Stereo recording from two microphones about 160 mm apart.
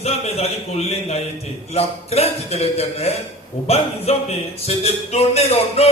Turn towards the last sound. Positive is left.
turn(degrees=40)  # may be behind; listen again after turning